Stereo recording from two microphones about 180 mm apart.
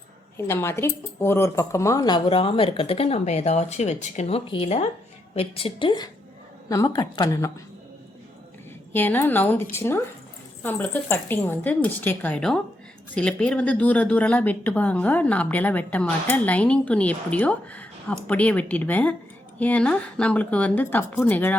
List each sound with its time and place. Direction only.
0.3 s a woman's voice: 15° left (ahead or behind)
8.9 s speech: 10° left (ahead or behind)